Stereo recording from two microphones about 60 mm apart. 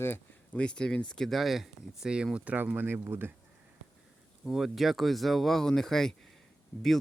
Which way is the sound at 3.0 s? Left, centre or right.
Right.